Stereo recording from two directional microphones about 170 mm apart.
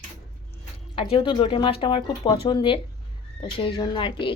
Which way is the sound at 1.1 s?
30° left (ahead or behind).